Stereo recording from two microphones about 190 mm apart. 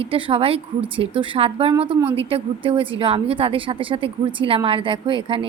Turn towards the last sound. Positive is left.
turn(degrees=-25)  # may be behind; listen again after turning